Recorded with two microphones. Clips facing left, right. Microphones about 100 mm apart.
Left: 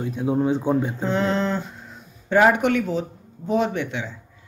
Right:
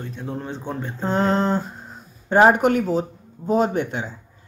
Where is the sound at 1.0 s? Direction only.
40° right (ahead or behind).